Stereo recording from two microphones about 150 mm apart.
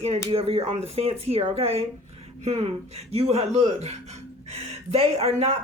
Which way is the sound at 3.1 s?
40° right (ahead or behind).